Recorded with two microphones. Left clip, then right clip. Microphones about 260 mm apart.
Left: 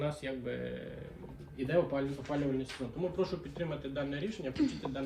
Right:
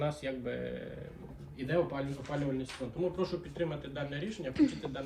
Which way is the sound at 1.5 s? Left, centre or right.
Right.